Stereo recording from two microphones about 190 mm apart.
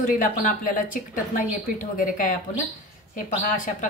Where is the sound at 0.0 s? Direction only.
45° left (ahead or behind).